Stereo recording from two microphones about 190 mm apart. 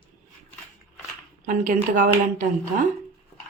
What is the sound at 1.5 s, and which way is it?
Speech, 45° right (ahead or behind).